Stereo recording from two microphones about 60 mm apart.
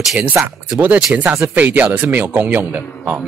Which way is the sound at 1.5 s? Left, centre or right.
Right.